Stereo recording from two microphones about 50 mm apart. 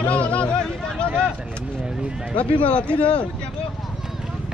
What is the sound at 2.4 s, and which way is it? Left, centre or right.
Speech, left.